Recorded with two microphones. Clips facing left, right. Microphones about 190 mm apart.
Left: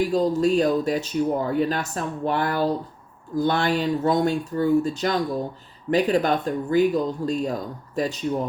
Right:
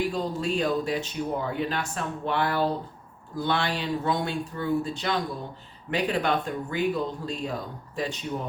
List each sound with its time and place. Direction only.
0.0 s speech: 40° left (ahead or behind)